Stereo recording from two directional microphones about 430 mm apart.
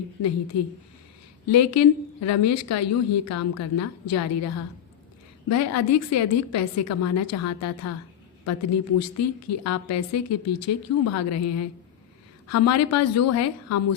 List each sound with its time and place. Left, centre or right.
0.5 s a woman's voice: left